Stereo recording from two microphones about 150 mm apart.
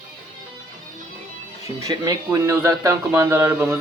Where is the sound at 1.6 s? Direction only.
20° right (ahead or behind).